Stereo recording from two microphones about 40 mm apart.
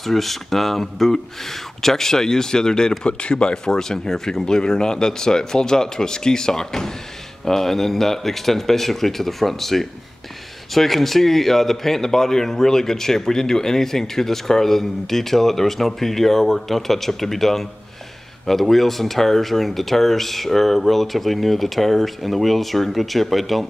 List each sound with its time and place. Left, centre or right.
0.0 s speech: centre